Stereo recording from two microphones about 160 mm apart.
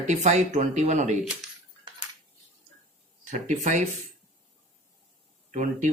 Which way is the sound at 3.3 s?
50° right (ahead or behind).